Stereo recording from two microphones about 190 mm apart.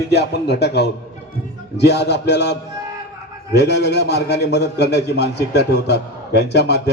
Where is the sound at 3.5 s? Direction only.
60° left (ahead or behind).